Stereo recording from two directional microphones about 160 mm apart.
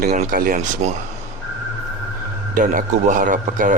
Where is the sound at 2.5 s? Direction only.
60° right (ahead or behind).